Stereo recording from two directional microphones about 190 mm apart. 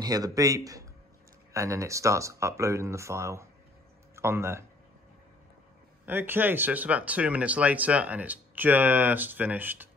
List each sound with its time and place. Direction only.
0.0 s speech: 20° right (ahead or behind)
6.0 s speech: 10° right (ahead or behind)